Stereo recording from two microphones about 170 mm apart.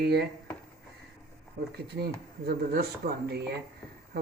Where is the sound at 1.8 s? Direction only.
70° right (ahead or behind).